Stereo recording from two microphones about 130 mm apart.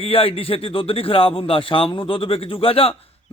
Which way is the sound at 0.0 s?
45° left (ahead or behind).